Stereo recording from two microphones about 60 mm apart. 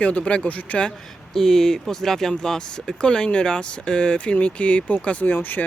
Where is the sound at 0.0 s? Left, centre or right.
Left.